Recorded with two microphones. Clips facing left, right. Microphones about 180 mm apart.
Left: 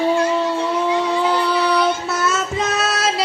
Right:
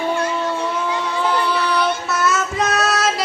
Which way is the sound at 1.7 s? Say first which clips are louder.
Left 2 dB; 30° left (ahead or behind).